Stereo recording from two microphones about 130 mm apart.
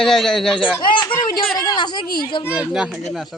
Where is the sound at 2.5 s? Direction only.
5° right (ahead or behind).